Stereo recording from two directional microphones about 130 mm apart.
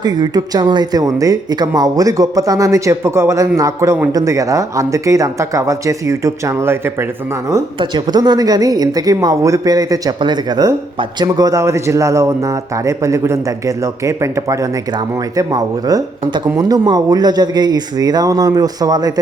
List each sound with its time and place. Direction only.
0.0 s speech: 30° right (ahead or behind)
7.8 s speech: 35° right (ahead or behind)